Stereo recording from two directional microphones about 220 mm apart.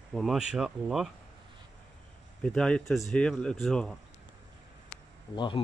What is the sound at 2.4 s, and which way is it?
Speech, 5° left (ahead or behind).